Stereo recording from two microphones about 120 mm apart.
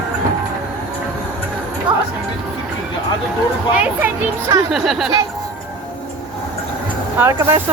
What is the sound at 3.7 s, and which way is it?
Music, 10° right (ahead or behind).